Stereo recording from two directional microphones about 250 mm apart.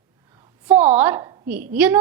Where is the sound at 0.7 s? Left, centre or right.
Right.